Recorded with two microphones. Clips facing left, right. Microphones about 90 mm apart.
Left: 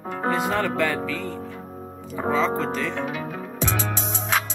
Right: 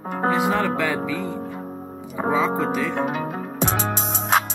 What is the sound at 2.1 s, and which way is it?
Music, 15° right (ahead or behind).